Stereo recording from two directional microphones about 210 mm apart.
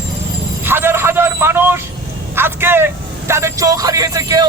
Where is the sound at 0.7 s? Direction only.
10° right (ahead or behind).